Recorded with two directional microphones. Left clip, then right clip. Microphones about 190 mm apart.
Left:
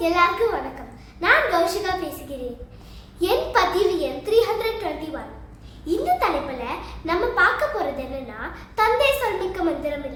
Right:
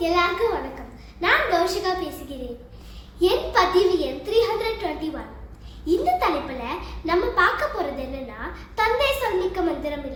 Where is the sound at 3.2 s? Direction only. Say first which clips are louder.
Even; 10° left (ahead or behind).